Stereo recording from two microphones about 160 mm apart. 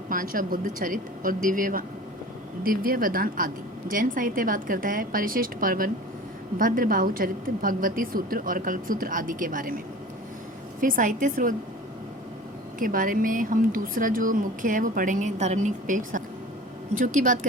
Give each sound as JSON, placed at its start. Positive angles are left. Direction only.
{"t": 0.1, "sound": "a woman's voice", "side_deg": -60}
{"t": 12.8, "sound": "a woman's voice", "side_deg": -60}